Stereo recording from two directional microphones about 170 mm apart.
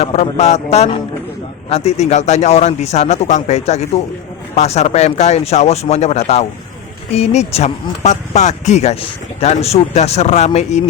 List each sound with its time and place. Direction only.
0.0 s speech: 40° left (ahead or behind)